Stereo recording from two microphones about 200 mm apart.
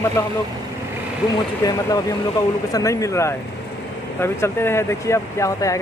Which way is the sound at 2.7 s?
15° left (ahead or behind).